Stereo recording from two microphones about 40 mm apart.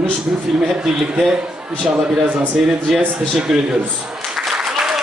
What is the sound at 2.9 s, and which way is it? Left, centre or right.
Speech, centre.